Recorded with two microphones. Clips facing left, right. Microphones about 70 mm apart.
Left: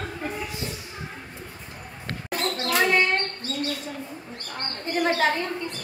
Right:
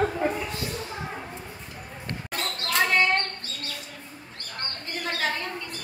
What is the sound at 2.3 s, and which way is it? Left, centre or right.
Basketball bounce, centre.